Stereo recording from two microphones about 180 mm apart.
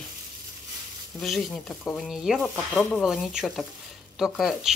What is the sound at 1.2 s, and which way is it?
Speech, centre (ahead or behind).